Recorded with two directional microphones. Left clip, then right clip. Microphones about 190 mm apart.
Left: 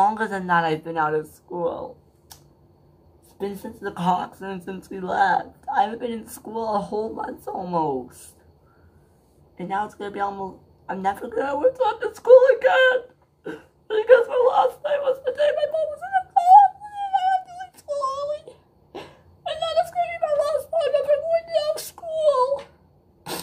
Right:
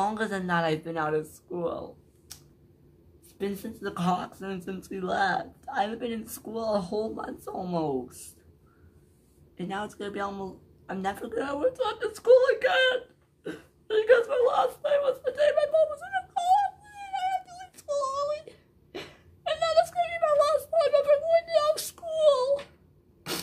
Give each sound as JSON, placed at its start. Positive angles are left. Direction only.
{"t": 0.0, "sound": "speech", "side_deg": 0}
{"t": 3.3, "sound": "speech", "side_deg": -15}
{"t": 9.6, "sound": "speech", "side_deg": -10}
{"t": 18.9, "sound": "cat", "side_deg": -15}
{"t": 19.7, "sound": "a sound", "side_deg": -10}